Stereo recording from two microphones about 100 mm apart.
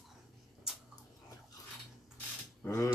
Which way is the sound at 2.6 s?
30° left (ahead or behind).